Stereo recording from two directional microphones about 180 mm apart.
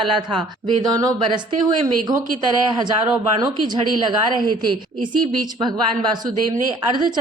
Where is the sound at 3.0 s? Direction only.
10° right (ahead or behind).